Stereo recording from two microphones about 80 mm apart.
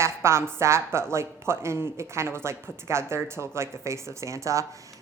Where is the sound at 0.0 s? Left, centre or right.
Right.